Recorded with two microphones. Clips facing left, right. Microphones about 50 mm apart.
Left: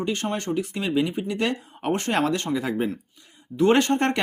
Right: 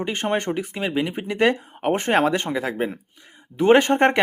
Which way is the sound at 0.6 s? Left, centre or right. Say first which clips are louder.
Even; centre.